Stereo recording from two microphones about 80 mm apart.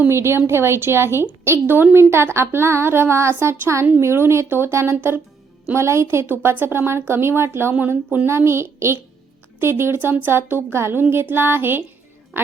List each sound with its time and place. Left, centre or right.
0.1 s a woman's voice: right
8.3 s a woman's voice: right